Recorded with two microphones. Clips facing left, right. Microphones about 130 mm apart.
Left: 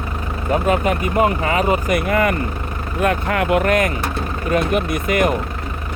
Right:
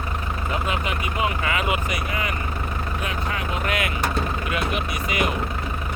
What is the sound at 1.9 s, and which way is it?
Speech, 55° left (ahead or behind).